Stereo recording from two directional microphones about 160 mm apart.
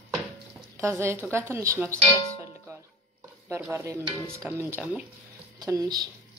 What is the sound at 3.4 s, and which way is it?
Speech, 10° right (ahead or behind).